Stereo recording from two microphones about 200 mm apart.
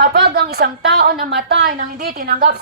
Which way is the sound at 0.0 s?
50° right (ahead or behind).